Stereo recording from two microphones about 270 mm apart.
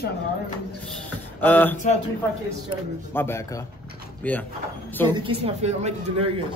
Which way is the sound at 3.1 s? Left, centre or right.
Centre.